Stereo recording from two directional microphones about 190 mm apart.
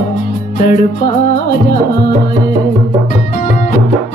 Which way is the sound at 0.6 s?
50° left (ahead or behind).